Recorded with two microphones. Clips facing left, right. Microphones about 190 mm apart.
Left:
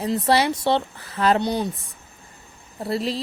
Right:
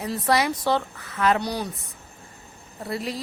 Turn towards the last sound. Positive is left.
turn(degrees=30)  # may be behind; listen again after turning